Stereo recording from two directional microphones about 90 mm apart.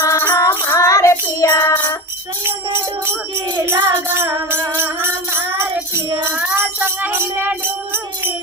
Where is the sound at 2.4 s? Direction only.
25° right (ahead or behind).